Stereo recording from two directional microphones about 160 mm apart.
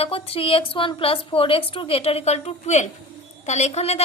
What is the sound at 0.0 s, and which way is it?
A woman's voice, 35° left (ahead or behind).